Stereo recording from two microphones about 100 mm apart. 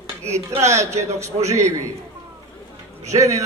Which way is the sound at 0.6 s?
30° right (ahead or behind).